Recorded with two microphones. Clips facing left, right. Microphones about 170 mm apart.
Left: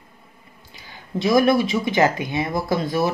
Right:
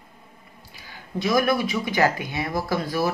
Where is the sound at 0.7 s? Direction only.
25° left (ahead or behind).